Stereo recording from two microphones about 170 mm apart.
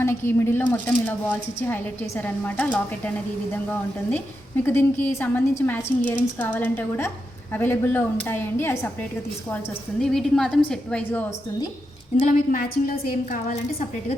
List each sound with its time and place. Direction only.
0.0 s a woman's voice: 15° left (ahead or behind)
10.0 s a woman's voice: 5° left (ahead or behind)
12.5 s a woman's voice: 60° left (ahead or behind)